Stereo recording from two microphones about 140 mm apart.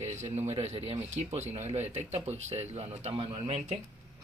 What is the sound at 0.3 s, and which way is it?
Speech, 50° right (ahead or behind).